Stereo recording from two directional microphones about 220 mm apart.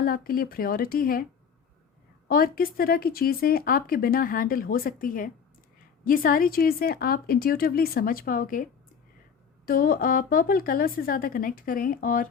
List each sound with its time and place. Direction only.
0.0 s a woman's voice: 40° left (ahead or behind)